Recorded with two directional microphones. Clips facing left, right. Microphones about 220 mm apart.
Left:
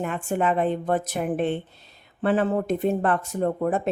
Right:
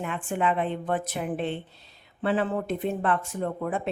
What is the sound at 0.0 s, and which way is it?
A woman's voice, 45° left (ahead or behind).